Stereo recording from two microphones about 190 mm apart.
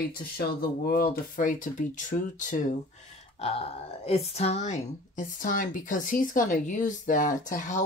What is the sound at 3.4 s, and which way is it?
Speech, 30° left (ahead or behind).